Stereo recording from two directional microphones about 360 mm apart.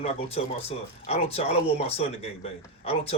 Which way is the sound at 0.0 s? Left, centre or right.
Centre.